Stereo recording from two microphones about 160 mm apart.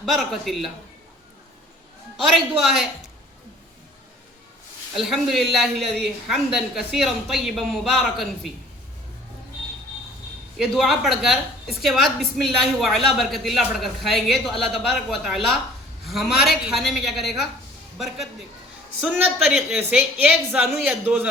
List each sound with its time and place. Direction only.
0.0 s a woman's voice: centre (ahead or behind)
2.2 s a woman's voice: centre (ahead or behind)
4.9 s a woman's voice: centre (ahead or behind)
10.8 s a woman's voice: centre (ahead or behind)